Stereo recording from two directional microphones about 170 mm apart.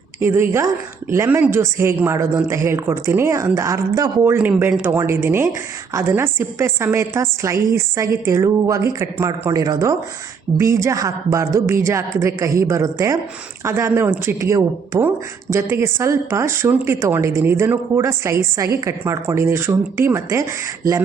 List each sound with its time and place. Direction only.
0.2 s a woman's voice: 15° right (ahead or behind)